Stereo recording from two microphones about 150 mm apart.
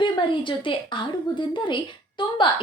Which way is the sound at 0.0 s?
35° left (ahead or behind).